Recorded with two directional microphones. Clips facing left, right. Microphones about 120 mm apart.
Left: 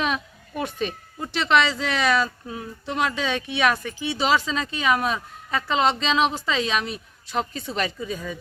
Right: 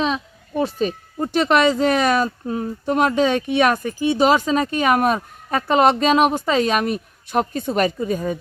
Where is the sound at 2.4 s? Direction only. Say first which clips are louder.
Right 10 dB; 40° right (ahead or behind).